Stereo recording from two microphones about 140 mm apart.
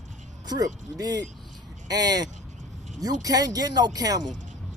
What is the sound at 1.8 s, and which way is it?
Speech, 25° right (ahead or behind).